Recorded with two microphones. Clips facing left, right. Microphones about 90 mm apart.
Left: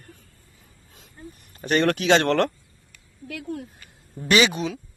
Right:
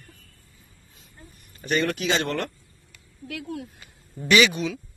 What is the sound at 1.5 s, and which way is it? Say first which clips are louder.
A man's voice: left 4 dB; 55° left (ahead or behind).